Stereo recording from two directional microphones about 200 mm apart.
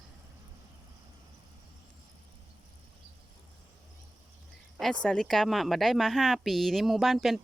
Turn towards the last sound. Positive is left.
turn(degrees=0)  # may be behind; listen again after turning